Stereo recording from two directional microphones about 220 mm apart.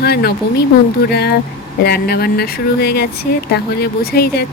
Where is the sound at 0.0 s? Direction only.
45° left (ahead or behind).